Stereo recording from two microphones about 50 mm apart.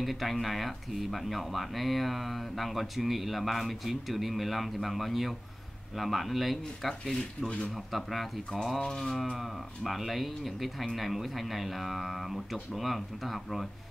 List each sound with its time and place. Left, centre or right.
0.0 s speech: centre
7.4 s speech: left
7.7 s speech: centre